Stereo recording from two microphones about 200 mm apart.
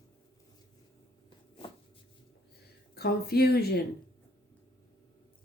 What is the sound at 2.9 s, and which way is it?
Speech, 50° left (ahead or behind).